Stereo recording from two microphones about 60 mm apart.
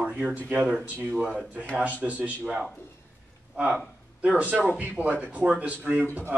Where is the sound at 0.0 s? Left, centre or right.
Right.